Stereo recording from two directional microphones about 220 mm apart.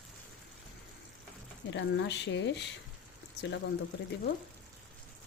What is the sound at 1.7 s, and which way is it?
Speech, 55° left (ahead or behind).